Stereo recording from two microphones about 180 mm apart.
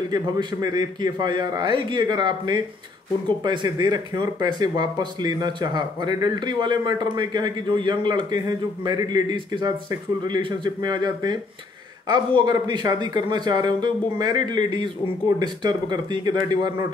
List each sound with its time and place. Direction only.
0.1 s speech: 25° right (ahead or behind)